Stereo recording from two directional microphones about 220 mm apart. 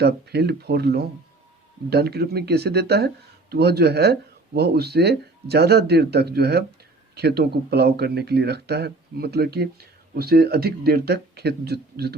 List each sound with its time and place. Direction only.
0.0 s speech: 50° right (ahead or behind)